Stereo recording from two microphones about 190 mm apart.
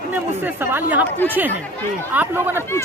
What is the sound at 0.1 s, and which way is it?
Speech, 10° right (ahead or behind).